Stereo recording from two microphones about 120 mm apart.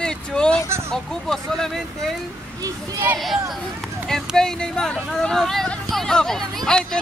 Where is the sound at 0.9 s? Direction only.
5° left (ahead or behind).